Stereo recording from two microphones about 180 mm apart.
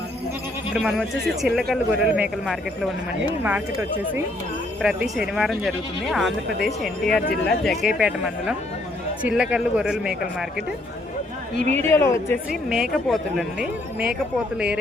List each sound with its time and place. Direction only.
0.7 s speech: centre (ahead or behind)
3.4 s speech: 10° right (ahead or behind)
11.6 s speech: 40° right (ahead or behind)
11.9 s speech: 15° left (ahead or behind)
12.7 s speech: centre (ahead or behind)